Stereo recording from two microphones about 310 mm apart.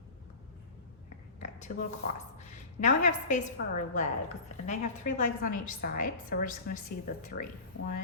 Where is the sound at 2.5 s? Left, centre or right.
Left.